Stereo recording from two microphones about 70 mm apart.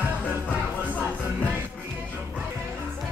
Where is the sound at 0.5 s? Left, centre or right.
Left.